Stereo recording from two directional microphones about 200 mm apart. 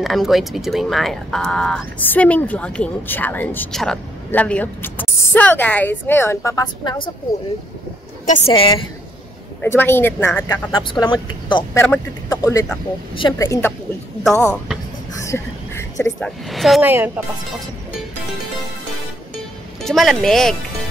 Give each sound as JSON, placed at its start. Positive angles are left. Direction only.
{"t": 0.0, "sound": "speech", "side_deg": 0}
{"t": 8.3, "sound": "speech", "side_deg": 30}
{"t": 9.6, "sound": "speech", "side_deg": 10}
{"t": 10.5, "sound": "speech", "side_deg": 20}
{"t": 15.1, "sound": "a sound", "side_deg": 15}
{"t": 16.3, "sound": "speech", "side_deg": 0}
{"t": 19.8, "sound": "speech", "side_deg": 0}